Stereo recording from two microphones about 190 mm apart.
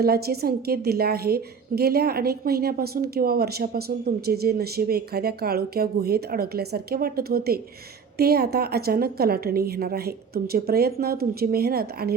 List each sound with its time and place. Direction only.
0.0 s a woman's voice: 55° right (ahead or behind)